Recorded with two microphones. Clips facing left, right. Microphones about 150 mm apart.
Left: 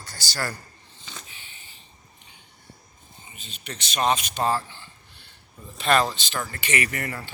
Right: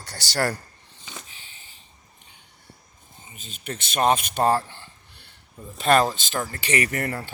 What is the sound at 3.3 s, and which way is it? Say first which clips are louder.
Speech: right 5 dB; 45° right (ahead or behind).